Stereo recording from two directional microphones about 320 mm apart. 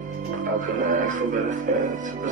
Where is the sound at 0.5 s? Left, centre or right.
Right.